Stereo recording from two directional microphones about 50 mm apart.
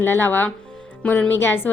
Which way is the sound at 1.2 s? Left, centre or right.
Left.